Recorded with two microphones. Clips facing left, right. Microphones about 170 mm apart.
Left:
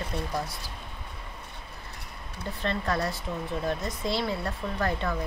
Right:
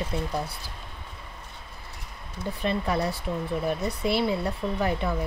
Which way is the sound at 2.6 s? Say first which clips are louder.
Right 2 dB; 10° right (ahead or behind).